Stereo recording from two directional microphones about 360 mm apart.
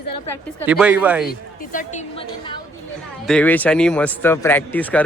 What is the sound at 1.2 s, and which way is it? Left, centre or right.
A woman's voice, left.